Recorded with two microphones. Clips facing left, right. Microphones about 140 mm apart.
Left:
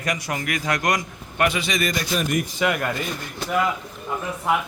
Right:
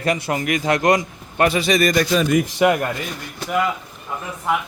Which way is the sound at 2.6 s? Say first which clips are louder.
Right 6 dB; 25° right (ahead or behind).